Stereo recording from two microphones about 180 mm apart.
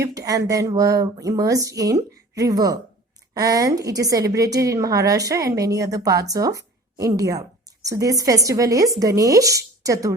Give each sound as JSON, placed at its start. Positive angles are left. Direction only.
{"t": 0.0, "sound": "a woman's voice", "side_deg": -20}